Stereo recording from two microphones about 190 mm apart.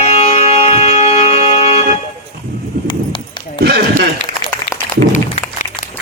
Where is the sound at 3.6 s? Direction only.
55° right (ahead or behind).